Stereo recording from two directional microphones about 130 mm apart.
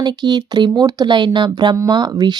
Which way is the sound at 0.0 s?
35° right (ahead or behind).